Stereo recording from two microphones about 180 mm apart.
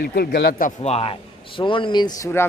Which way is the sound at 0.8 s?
35° left (ahead or behind).